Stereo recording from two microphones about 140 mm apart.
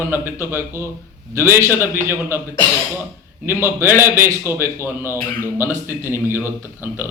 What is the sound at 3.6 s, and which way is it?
A man's voice, 15° right (ahead or behind).